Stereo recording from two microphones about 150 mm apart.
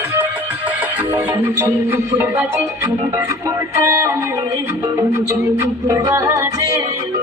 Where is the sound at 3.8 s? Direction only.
20° right (ahead or behind).